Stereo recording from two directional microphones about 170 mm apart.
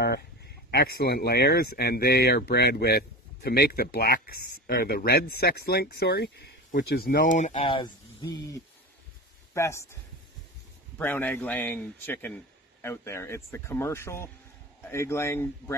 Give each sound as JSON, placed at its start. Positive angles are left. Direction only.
{"t": 0.0, "sound": "speech", "side_deg": 70}
{"t": 7.6, "sound": "speech", "side_deg": 25}
{"t": 11.0, "sound": "speech", "side_deg": 10}